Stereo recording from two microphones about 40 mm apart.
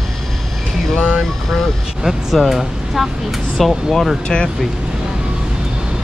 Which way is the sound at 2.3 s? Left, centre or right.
Centre.